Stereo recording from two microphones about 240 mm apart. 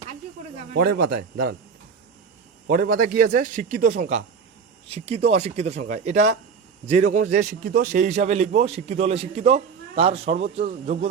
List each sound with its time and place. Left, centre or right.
0.7 s speech: right
2.6 s a man's voice: right